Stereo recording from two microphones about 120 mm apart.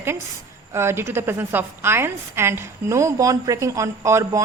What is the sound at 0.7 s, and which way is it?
A woman's voice, 20° right (ahead or behind).